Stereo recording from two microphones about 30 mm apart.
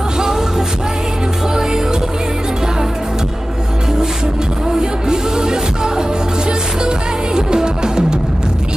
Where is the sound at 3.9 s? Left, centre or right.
Centre.